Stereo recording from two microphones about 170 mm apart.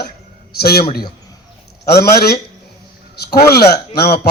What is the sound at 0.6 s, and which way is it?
Speech, 65° left (ahead or behind).